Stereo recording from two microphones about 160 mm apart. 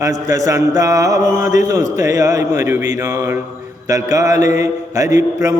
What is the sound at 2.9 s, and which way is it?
Mantra, 20° right (ahead or behind).